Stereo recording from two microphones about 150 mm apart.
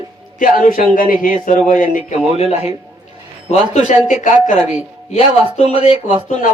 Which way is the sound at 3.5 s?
50° left (ahead or behind).